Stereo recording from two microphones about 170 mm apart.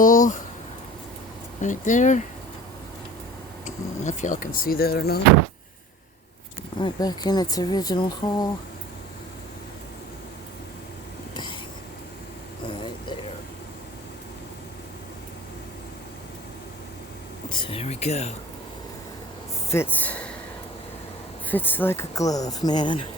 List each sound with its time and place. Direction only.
0.0 s speech: 50° left (ahead or behind)
1.6 s speech: 45° left (ahead or behind)
4.0 s speech: 45° left (ahead or behind); by 5.2 s 65° left (ahead or behind)
6.7 s speech: 25° left (ahead or behind)
12.6 s a sound: 30° left (ahead or behind)
17.5 s a sound: 30° left (ahead or behind)
19.7 s speech: 10° left (ahead or behind)
21.5 s speech: 10° left (ahead or behind); by 23.0 s 25° left (ahead or behind)